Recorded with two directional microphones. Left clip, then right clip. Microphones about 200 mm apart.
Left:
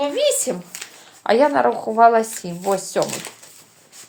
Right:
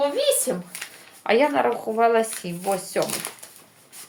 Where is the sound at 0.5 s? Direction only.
50° left (ahead or behind).